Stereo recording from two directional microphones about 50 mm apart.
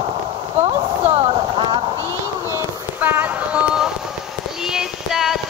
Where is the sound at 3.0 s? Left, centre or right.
Right.